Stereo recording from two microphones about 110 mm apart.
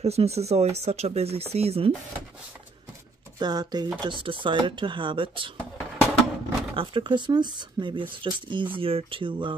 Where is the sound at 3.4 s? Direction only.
40° right (ahead or behind).